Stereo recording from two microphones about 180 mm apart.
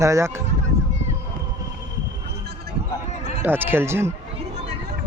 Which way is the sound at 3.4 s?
10° right (ahead or behind).